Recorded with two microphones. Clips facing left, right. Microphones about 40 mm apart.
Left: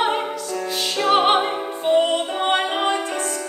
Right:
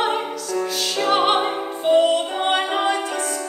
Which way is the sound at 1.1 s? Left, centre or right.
Centre.